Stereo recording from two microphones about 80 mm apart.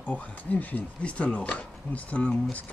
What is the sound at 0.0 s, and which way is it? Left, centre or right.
Speech, centre.